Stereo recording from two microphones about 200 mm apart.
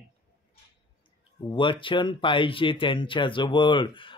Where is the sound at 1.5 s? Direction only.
25° left (ahead or behind).